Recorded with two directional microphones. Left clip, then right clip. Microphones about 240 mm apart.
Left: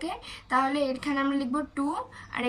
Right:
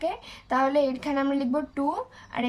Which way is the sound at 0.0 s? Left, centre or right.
Right.